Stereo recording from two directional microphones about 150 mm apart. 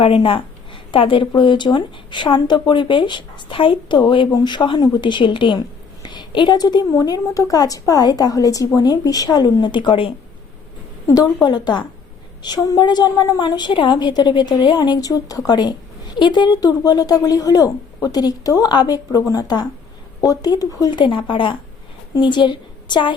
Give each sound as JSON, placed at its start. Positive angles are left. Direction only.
{"t": 0.0, "sound": "speech", "side_deg": 35}
{"t": 11.4, "sound": "a woman's voice", "side_deg": 30}